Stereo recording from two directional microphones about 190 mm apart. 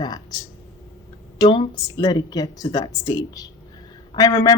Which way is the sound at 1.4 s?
25° left (ahead or behind).